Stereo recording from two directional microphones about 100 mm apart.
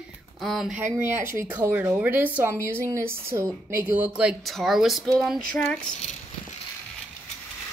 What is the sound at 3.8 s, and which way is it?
Speech, 15° right (ahead or behind).